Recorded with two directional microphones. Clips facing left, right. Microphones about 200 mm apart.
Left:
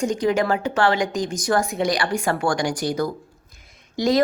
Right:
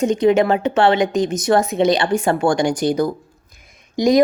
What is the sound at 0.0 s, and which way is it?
A woman's voice, 20° right (ahead or behind).